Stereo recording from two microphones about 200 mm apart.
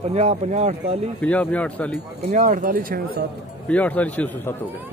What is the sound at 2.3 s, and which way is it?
Speech, 40° right (ahead or behind).